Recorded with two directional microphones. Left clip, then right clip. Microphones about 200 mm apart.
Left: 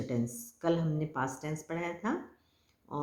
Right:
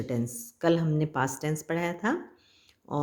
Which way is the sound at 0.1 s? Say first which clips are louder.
Right 3 dB; 45° right (ahead or behind).